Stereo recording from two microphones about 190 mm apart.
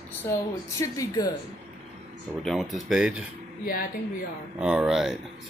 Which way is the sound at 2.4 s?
Centre (ahead or behind).